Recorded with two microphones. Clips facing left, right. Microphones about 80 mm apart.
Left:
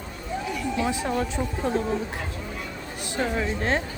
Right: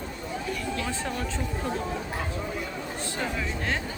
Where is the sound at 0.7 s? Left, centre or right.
Centre.